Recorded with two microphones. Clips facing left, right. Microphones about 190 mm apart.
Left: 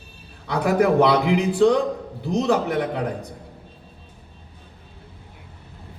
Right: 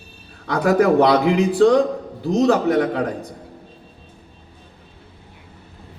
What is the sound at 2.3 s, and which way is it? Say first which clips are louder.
Speech: right 5 dB; 45° right (ahead or behind).